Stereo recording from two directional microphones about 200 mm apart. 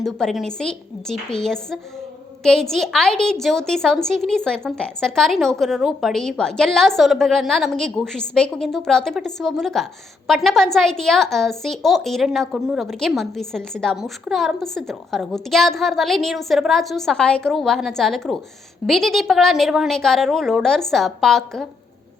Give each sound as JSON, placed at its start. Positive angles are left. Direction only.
{"t": 0.0, "sound": "a woman's voice", "side_deg": 0}